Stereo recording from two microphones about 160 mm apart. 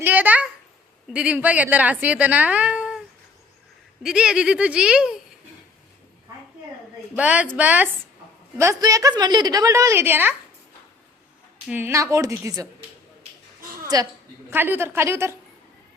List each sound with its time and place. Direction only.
0.0 s a sound: 10° right (ahead or behind)
1.1 s a woman's voice: 5° right (ahead or behind)
4.0 s speech: 5° right (ahead or behind)
7.2 s a woman's voice: 10° right (ahead or behind)
11.7 s a woman's voice: 15° right (ahead or behind)
13.8 s a woman's voice: 25° right (ahead or behind)
14.5 s a woman's voice: 15° right (ahead or behind)